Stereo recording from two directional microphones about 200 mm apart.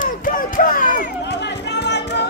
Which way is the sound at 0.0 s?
45° left (ahead or behind).